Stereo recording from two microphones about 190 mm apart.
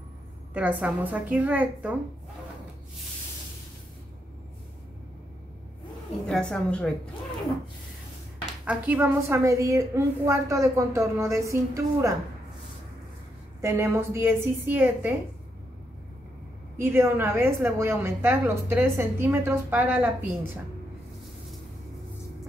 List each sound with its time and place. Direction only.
0.6 s a woman's voice: 10° right (ahead or behind)
6.2 s a woman's voice: 5° left (ahead or behind)
8.6 s a woman's voice: 10° right (ahead or behind)
13.6 s a woman's voice: 15° right (ahead or behind)
16.8 s a woman's voice: 10° right (ahead or behind)